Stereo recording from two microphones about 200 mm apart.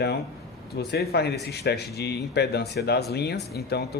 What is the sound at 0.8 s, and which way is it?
Speech, 55° left (ahead or behind).